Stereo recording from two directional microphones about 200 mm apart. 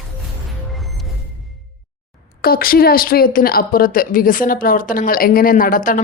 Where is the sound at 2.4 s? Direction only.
45° left (ahead or behind).